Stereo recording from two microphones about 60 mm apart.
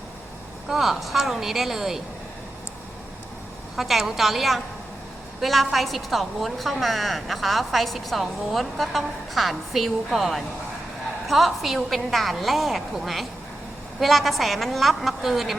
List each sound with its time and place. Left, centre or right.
0.7 s a woman's voice: centre
3.8 s a woman's voice: centre